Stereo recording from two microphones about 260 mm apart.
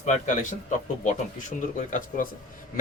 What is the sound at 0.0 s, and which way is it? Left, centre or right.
Speech, left.